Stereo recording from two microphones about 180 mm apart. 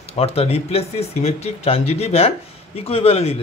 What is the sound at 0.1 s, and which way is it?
Speech, 35° left (ahead or behind).